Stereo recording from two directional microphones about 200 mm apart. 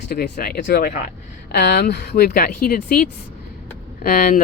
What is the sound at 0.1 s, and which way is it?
Speech, 50° left (ahead or behind).